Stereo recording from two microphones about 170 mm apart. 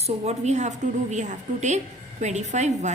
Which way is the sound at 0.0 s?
40° right (ahead or behind).